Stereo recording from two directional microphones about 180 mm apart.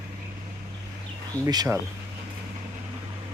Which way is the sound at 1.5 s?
20° right (ahead or behind).